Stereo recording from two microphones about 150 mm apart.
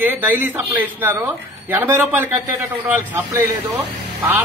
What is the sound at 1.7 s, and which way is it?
Speech, 15° right (ahead or behind).